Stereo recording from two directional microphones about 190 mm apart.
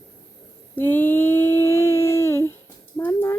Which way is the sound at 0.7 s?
10° left (ahead or behind).